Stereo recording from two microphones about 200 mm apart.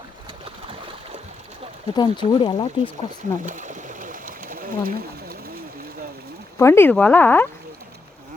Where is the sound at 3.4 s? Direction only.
40° right (ahead or behind).